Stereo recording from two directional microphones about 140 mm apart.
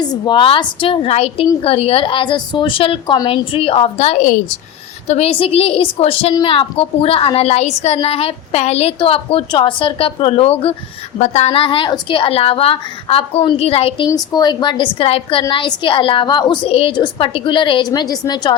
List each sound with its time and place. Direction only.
0.1 s a woman's voice: 35° left (ahead or behind)
14.1 s a woman's voice: 30° left (ahead or behind)